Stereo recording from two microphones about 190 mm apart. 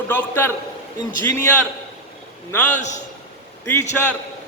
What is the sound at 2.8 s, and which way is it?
Speech, 40° left (ahead or behind).